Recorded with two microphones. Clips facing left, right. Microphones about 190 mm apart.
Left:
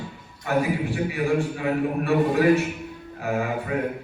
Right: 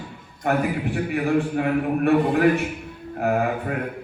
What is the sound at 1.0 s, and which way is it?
A man's voice, 60° right (ahead or behind).